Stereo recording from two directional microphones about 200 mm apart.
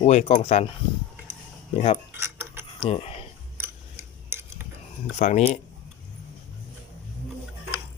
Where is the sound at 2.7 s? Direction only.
30° left (ahead or behind).